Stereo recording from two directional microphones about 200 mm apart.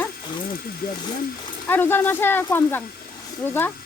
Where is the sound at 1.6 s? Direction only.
10° left (ahead or behind).